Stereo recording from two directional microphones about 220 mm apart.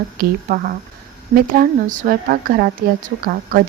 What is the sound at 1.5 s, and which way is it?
Speech, 40° right (ahead or behind).